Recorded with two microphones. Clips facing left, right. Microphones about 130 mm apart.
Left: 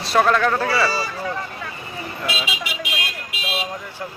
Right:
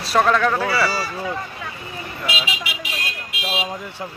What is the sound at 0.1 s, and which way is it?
Speech, centre (ahead or behind).